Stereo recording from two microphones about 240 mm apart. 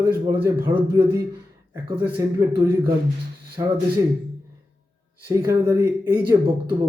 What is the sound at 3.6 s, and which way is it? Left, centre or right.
Speech, centre.